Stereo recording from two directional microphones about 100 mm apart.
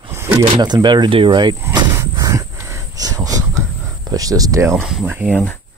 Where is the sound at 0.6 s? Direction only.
45° right (ahead or behind).